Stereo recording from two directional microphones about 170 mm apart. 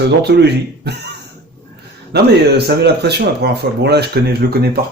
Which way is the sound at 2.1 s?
70° right (ahead or behind).